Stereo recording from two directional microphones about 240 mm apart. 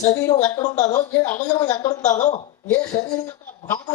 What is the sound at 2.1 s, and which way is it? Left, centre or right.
Speech, left.